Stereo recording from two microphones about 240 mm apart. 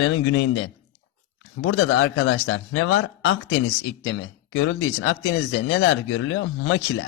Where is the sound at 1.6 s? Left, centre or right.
Left.